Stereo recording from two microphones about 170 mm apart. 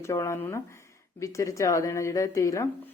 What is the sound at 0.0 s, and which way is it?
Speech, 20° left (ahead or behind).